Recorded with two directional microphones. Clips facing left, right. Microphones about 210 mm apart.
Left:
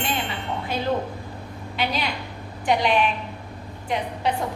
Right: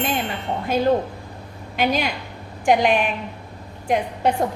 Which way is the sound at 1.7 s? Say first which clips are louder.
Right 5 dB; 45° right (ahead or behind).